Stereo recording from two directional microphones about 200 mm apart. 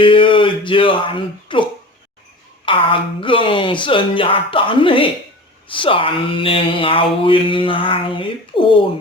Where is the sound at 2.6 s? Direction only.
25° left (ahead or behind).